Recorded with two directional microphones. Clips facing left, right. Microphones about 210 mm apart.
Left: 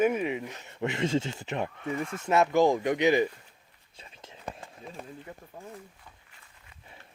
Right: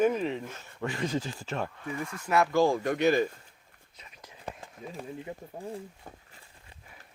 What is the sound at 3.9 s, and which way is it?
Whispering, 30° left (ahead or behind).